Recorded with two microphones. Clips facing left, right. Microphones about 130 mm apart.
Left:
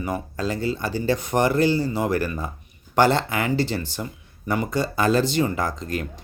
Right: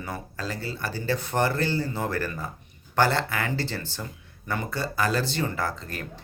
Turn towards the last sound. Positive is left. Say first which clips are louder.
# left 5 dB
turn(degrees=15)  # may be behind; listen again after turning